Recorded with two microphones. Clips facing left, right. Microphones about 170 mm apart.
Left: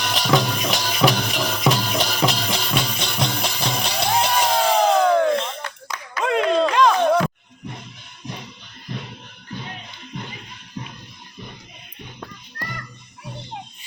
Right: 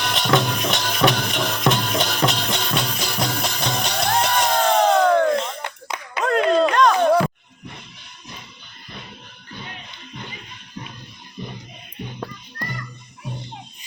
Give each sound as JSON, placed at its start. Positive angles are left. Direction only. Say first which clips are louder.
{"t": 0.0, "sound": "music", "louder": "even", "side_deg": 0}
{"t": 5.6, "sound": "clapping", "louder": "right 2 dB", "side_deg": -25}
{"t": 6.2, "sound": "a sound", "louder": "right 1 dB", "side_deg": 0}